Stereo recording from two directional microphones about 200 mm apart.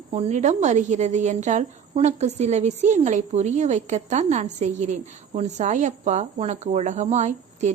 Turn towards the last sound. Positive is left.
turn(degrees=-35)  # may be behind; listen again after turning